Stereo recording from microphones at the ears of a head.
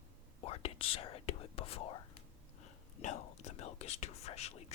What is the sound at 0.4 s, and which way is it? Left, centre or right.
Whispering, left.